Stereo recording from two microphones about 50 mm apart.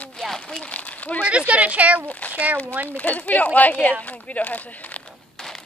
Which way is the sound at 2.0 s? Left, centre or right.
Left.